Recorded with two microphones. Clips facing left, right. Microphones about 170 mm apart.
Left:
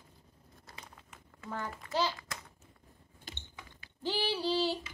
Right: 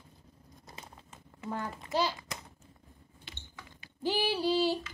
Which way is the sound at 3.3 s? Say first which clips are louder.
Left 3 dB; 45° left (ahead or behind).